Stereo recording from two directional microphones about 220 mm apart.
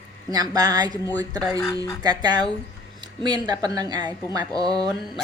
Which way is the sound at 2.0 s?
20° right (ahead or behind).